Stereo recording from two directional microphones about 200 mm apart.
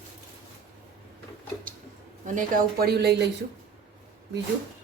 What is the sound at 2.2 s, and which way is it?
Speech, 45° right (ahead or behind).